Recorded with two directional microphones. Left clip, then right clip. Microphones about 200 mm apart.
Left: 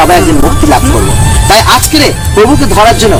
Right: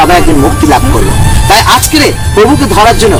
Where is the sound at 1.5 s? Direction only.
5° left (ahead or behind).